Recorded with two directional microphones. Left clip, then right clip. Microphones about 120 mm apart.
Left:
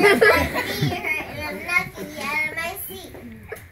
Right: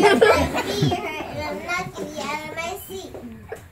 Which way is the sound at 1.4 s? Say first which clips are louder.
Left 1 dB; 15° right (ahead or behind).